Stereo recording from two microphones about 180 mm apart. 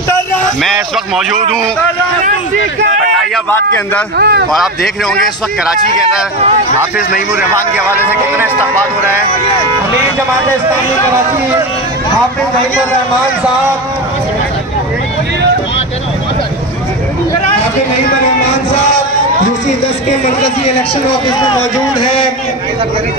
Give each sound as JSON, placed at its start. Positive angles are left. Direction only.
{"t": 3.4, "sound": "a man's voice", "side_deg": 10}
{"t": 4.2, "sound": "speech", "side_deg": -60}
{"t": 7.3, "sound": "a man's voice", "side_deg": -10}
{"t": 21.3, "sound": "speech", "side_deg": 25}